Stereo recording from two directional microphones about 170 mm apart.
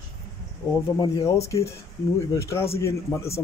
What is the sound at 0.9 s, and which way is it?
A man's voice, 20° left (ahead or behind).